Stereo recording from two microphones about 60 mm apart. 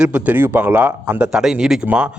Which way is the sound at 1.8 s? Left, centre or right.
Right.